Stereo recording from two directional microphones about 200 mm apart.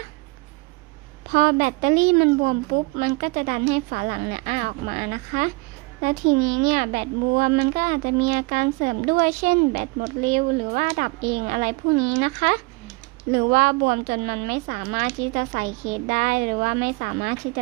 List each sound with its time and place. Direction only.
1.3 s a child's voice: 40° right (ahead or behind)